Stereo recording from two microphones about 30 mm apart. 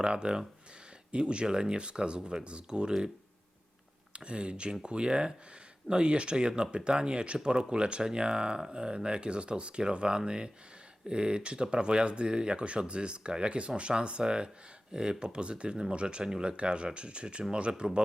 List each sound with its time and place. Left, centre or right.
0.0 s speech: right
4.1 s speech: right